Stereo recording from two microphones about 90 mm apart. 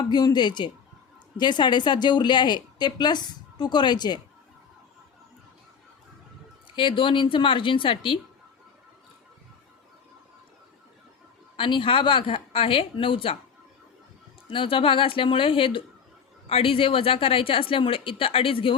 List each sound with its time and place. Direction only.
0.1 s a woman's voice: 50° left (ahead or behind)
6.7 s a woman's voice: 70° left (ahead or behind)
11.5 s a woman's voice: 70° left (ahead or behind)
14.5 s a woman's voice: 75° left (ahead or behind)
16.5 s a woman's voice: 90° left